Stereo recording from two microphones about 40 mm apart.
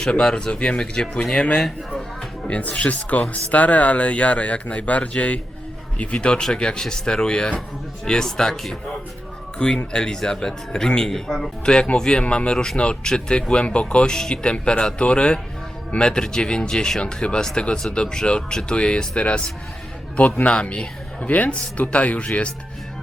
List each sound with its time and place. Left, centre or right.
0.1 s speech: left
2.5 s speech: left; by 9.0 s centre
9.6 s speech: left
11.1 s speech: centre
11.6 s speech: left
20.5 s speech: left